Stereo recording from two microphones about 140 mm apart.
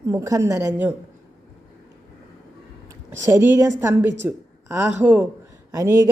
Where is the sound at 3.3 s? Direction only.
15° right (ahead or behind).